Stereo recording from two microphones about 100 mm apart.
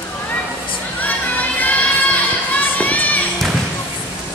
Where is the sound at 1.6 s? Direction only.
15° left (ahead or behind).